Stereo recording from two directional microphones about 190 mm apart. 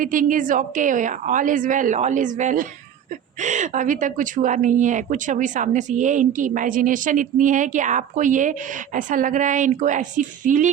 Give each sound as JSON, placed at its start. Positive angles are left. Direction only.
{"t": 0.0, "sound": "a woman's voice", "side_deg": -45}